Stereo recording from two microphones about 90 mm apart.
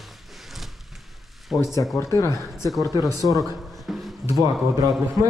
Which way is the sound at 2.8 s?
40° left (ahead or behind).